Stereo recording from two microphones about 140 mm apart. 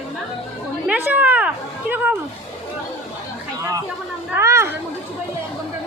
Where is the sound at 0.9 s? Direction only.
10° right (ahead or behind).